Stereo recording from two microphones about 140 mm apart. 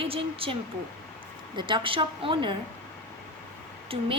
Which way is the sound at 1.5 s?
35° right (ahead or behind).